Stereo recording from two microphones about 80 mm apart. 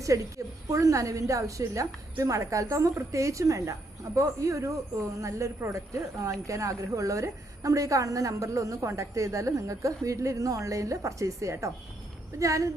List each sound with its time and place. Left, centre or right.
0.1 s a woman's voice: right